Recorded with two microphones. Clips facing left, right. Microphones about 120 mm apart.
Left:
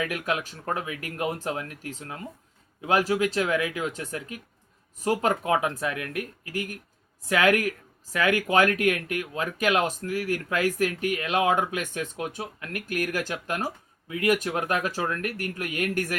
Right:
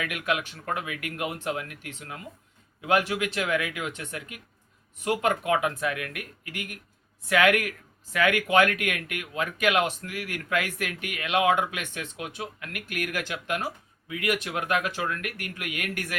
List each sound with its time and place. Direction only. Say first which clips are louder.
0.0 s speech: left 1 dB; 35° left (ahead or behind)